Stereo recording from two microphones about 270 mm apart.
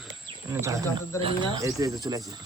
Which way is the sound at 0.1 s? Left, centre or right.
Centre.